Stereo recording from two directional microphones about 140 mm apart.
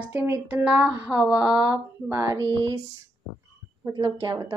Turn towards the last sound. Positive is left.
turn(degrees=-30)  # may be behind; listen again after turning